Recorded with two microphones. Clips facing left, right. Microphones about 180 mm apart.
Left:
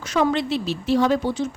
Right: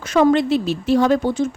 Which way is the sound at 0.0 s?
55° right (ahead or behind).